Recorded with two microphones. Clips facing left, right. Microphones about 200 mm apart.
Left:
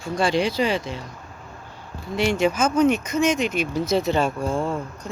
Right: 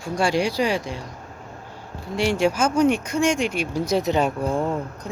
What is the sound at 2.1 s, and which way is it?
Speech, 10° right (ahead or behind).